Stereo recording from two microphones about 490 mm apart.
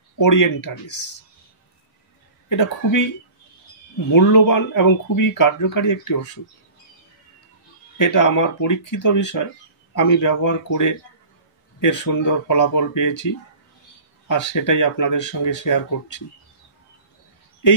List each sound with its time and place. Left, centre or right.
0.2 s speech: left
2.5 s speech: left
4.1 s speech: left
8.0 s speech: left